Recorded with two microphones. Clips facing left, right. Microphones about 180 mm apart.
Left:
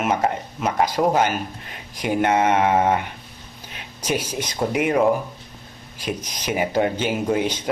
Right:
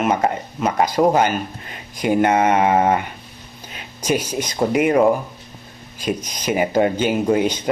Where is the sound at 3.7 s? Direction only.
5° left (ahead or behind).